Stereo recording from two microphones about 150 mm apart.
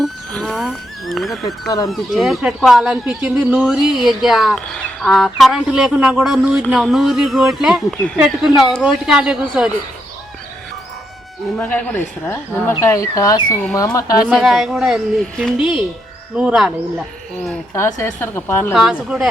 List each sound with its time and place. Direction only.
0.0 s a sound: centre (ahead or behind)
1.6 s speech: 25° left (ahead or behind)
1.9 s speech: centre (ahead or behind)
11.5 s speech: 10° left (ahead or behind); by 14.3 s 25° left (ahead or behind)
14.3 s speech: 5° right (ahead or behind)
17.7 s speech: 15° left (ahead or behind)
18.7 s speech: 5° right (ahead or behind)